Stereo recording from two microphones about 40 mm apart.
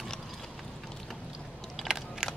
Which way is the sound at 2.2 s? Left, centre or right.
Centre.